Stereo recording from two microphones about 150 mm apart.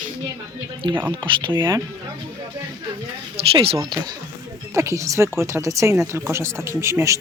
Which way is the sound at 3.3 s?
40° right (ahead or behind).